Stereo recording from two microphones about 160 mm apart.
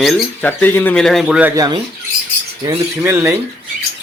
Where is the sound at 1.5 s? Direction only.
25° right (ahead or behind).